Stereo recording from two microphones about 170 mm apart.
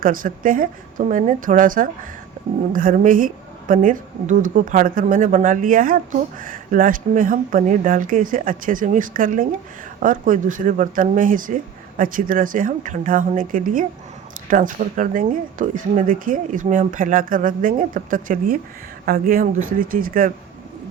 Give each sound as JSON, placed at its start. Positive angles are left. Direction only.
{"t": 0.0, "sound": "a woman's voice", "side_deg": -55}